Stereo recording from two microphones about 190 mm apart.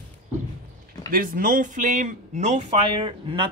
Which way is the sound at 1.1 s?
45° right (ahead or behind).